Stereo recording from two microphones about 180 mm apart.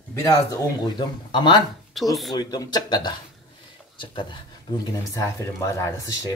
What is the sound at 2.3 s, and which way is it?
Speech, 20° left (ahead or behind).